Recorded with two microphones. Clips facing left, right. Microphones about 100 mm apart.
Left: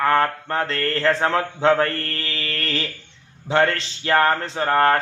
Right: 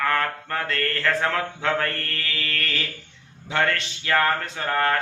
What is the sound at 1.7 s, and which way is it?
Speech, 30° left (ahead or behind).